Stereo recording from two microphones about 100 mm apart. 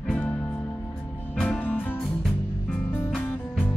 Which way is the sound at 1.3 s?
10° left (ahead or behind).